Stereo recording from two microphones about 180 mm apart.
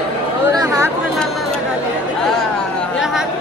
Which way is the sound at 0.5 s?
15° right (ahead or behind).